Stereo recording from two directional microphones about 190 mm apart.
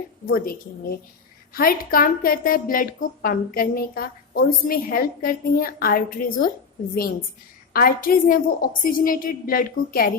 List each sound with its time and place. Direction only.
0.3 s a woman's voice: 50° left (ahead or behind)
1.5 s a woman's voice: 50° left (ahead or behind)
7.7 s a woman's voice: 50° left (ahead or behind)